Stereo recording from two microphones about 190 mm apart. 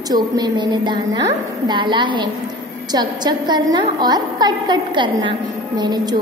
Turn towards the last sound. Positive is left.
turn(degrees=-20)  # may be behind; listen again after turning